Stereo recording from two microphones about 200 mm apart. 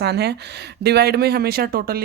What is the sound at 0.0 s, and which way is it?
Speech, 55° right (ahead or behind).